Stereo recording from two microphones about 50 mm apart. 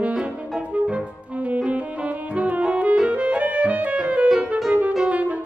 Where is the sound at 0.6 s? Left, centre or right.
Right.